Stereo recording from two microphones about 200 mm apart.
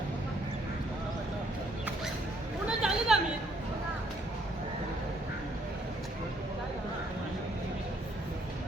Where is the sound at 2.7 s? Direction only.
5° right (ahead or behind).